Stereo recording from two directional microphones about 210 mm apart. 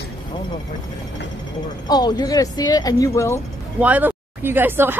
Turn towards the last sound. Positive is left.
turn(degrees=-10)  # may be behind; listen again after turning